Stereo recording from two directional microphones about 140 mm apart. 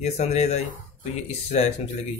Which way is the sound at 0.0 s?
55° left (ahead or behind).